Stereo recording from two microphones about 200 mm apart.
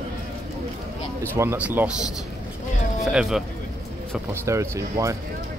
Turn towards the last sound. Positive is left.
turn(degrees=-15)  # may be behind; listen again after turning